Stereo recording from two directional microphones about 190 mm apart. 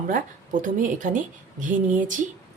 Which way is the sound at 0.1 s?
45° right (ahead or behind).